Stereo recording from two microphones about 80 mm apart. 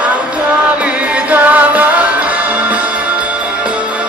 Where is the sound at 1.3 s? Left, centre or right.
Centre.